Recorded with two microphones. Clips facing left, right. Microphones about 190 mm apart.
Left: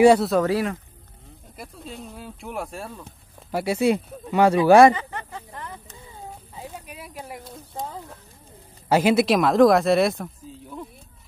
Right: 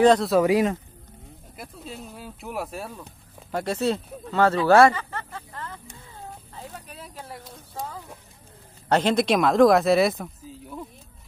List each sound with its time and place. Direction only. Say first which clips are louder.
0.0 s speech: left 3 dB; 10° left (ahead or behind)
0.3 s speech: right 2 dB; 10° right (ahead or behind)
1.6 s speech: left 1 dB; centre (ahead or behind)
3.5 s speech: left 4 dB; 10° left (ahead or behind)
6.5 s a sound: left 2 dB; 10° left (ahead or behind)
7.7 s clip-clop: left 2 dB; 20° left (ahead or behind)
8.8 s speech: left 3 dB; 10° left (ahead or behind)